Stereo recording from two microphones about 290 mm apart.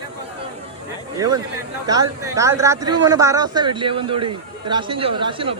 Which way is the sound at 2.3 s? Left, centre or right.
Centre.